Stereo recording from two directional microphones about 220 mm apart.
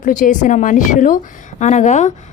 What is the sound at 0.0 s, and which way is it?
A woman's voice, 35° left (ahead or behind).